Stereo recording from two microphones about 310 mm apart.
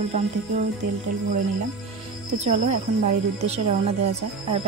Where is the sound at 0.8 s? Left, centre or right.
Right.